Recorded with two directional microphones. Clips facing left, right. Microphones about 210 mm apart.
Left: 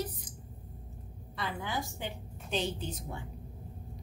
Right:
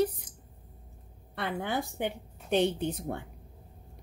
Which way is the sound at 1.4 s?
60° right (ahead or behind).